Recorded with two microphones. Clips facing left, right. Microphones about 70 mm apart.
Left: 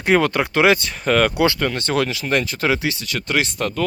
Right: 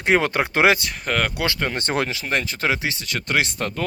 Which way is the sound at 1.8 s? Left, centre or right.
Right.